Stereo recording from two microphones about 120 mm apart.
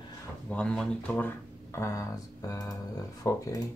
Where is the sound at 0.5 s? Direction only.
10° left (ahead or behind).